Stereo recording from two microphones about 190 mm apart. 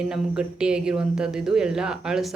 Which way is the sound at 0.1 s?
5° right (ahead or behind).